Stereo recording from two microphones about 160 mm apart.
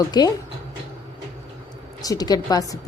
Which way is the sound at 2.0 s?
25° left (ahead or behind).